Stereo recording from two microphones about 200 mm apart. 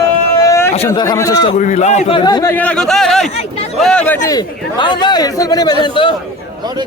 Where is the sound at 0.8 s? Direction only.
20° left (ahead or behind).